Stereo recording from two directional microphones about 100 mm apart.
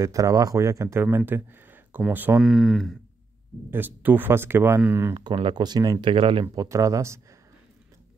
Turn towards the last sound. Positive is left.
turn(degrees=-30)  # may be behind; listen again after turning